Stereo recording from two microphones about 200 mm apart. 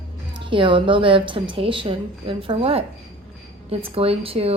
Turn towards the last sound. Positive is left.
turn(degrees=-30)  # may be behind; listen again after turning